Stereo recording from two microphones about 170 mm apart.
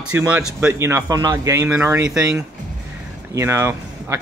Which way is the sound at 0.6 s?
15° right (ahead or behind).